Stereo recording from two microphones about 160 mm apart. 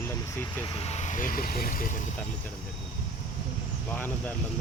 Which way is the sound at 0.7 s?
40° left (ahead or behind).